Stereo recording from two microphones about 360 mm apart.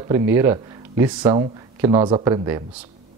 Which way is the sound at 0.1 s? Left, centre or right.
Centre.